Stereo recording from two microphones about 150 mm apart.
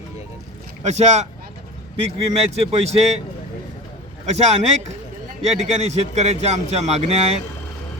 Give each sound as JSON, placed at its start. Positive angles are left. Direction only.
{"t": 0.9, "sound": "a man's voice", "side_deg": -50}
{"t": 4.3, "sound": "a man's voice", "side_deg": -45}